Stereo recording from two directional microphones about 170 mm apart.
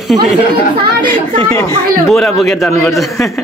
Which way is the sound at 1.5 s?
20° left (ahead or behind).